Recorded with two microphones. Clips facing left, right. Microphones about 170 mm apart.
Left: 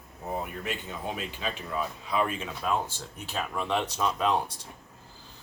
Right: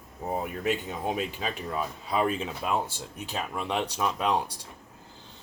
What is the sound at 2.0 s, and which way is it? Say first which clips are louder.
Speech: right 3 dB; 35° right (ahead or behind).